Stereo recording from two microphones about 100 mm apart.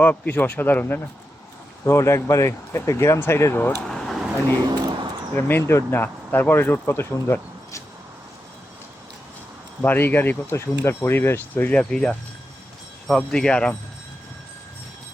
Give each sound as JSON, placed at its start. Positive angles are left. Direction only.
{"t": 0.0, "sound": "speech", "side_deg": 15}
{"t": 3.8, "sound": "vehicle", "side_deg": 5}
{"t": 4.7, "sound": "a sound", "side_deg": -50}
{"t": 5.3, "sound": "speech", "side_deg": 20}
{"t": 9.8, "sound": "speech", "side_deg": 20}